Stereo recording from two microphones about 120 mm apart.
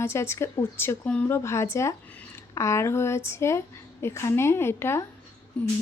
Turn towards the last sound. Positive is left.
turn(degrees=10)  # may be behind; listen again after turning